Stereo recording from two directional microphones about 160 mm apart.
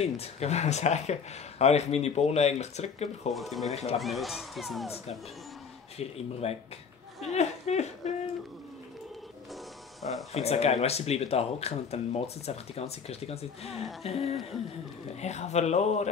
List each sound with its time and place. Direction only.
0.0 s speech: 40° left (ahead or behind)
3.3 s speech: centre (ahead or behind)
3.7 s speech: 40° left (ahead or behind)
4.0 s speech: centre (ahead or behind)
5.9 s speech: 40° left (ahead or behind)
7.2 s a sound: 45° left (ahead or behind)
10.3 s speech: 40° left (ahead or behind)